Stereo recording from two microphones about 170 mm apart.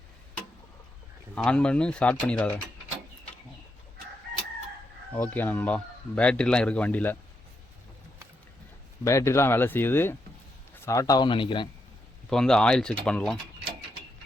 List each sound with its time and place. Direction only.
1.4 s speech: 5° left (ahead or behind)
5.1 s speech: 10° left (ahead or behind)
9.0 s speech: 15° left (ahead or behind)
12.3 s speech: 5° left (ahead or behind)